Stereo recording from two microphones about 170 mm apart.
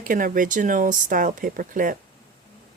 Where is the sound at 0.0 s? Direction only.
50° right (ahead or behind).